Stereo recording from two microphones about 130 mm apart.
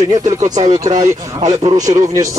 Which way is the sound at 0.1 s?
65° right (ahead or behind).